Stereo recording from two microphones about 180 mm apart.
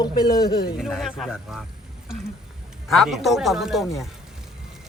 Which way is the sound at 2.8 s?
Centre (ahead or behind).